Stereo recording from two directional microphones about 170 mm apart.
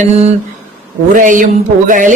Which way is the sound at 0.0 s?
40° right (ahead or behind).